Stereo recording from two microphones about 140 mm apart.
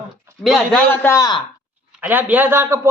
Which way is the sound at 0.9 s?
20° left (ahead or behind).